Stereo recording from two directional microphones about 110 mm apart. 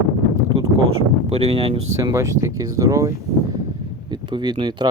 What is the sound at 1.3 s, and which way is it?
Speech, 70° right (ahead or behind).